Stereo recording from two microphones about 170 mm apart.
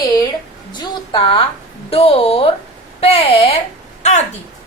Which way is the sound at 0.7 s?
25° left (ahead or behind).